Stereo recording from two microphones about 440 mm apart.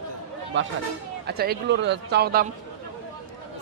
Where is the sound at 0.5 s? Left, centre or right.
Right.